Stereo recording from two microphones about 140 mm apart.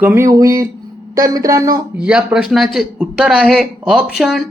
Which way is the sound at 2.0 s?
5° right (ahead or behind).